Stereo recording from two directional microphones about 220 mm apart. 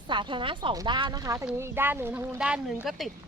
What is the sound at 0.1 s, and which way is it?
Speech, 20° right (ahead or behind).